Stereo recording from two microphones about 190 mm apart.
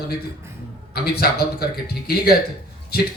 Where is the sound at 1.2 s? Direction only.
55° left (ahead or behind).